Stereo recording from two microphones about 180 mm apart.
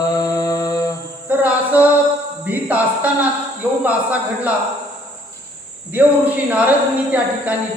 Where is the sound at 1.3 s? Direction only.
10° right (ahead or behind).